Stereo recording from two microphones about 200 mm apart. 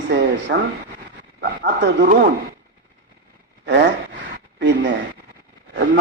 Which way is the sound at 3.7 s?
60° right (ahead or behind).